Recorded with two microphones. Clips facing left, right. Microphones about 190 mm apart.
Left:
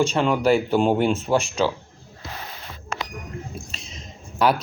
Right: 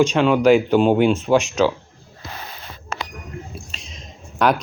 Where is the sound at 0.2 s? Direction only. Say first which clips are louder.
Right 5 dB; 90° right.